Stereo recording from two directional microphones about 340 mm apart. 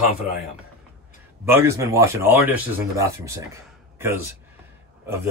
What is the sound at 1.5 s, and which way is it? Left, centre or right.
Speech, centre.